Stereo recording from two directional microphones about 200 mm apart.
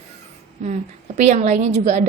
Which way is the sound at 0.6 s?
35° right (ahead or behind).